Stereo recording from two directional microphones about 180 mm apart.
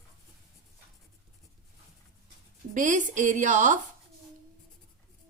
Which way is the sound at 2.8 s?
45° right (ahead or behind).